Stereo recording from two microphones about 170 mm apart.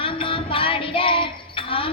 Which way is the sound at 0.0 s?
30° left (ahead or behind).